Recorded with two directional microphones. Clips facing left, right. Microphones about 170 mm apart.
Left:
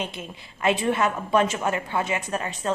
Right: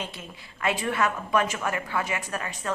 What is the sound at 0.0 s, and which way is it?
A woman's voice, 20° left (ahead or behind).